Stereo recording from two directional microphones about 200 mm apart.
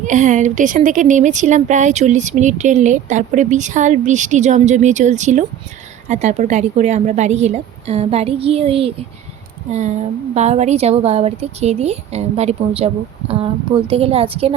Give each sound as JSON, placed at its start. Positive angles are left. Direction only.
{"t": 0.0, "sound": "a woman's voice", "side_deg": -40}